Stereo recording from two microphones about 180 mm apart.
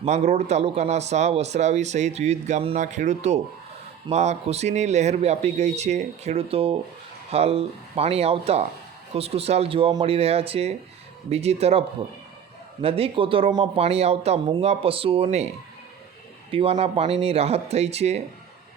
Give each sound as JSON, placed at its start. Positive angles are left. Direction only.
{"t": 0.0, "sound": "speech", "side_deg": -40}
{"t": 16.5, "sound": "speech", "side_deg": -30}